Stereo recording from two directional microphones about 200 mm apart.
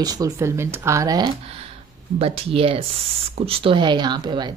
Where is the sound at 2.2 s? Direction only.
30° right (ahead or behind).